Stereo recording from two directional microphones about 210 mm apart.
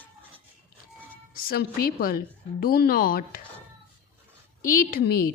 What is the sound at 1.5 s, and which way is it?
A woman's voice, 45° left (ahead or behind).